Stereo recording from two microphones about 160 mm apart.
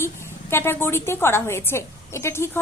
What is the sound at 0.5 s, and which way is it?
A woman's voice, 15° left (ahead or behind).